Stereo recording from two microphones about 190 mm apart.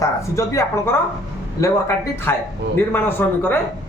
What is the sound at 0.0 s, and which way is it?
A man's voice, 15° left (ahead or behind).